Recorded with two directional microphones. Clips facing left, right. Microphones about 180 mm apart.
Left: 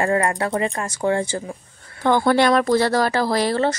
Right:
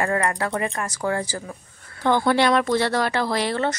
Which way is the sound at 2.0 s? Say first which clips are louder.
Left 2 dB; 45° left (ahead or behind).